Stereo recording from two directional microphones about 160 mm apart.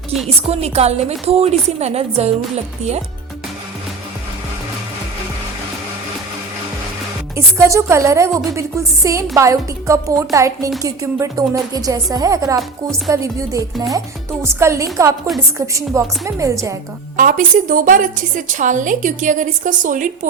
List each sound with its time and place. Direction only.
0.4 s a woman's voice: 40° right (ahead or behind)
7.3 s a woman's voice: 15° right (ahead or behind)
17.2 s a woman's voice: 55° right (ahead or behind)